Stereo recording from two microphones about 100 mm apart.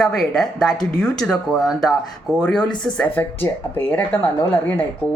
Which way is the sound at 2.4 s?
15° left (ahead or behind).